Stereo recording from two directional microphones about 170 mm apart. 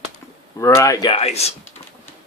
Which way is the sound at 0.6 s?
20° left (ahead or behind).